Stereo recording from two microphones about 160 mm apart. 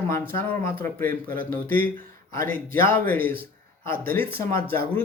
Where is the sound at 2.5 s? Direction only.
15° left (ahead or behind).